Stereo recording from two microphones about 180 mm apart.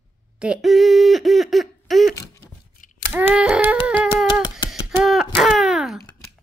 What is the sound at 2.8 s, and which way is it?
Scissors, 45° left (ahead or behind).